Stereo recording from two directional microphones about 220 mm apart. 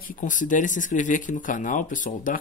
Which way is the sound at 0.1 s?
35° left (ahead or behind).